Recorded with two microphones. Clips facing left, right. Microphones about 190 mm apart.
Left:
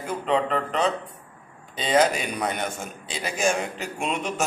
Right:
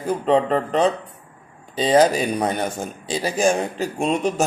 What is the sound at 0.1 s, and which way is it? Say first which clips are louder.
A man's voice: right 6 dB; 35° right (ahead or behind).